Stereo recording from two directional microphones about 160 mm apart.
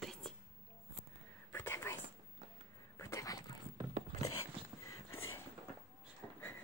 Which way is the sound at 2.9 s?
15° left (ahead or behind).